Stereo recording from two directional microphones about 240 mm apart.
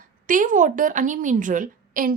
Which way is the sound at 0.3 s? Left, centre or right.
Right.